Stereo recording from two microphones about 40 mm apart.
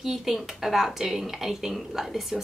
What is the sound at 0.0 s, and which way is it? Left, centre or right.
A woman's voice, centre.